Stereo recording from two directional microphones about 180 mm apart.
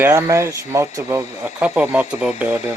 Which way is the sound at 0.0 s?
15° right (ahead or behind).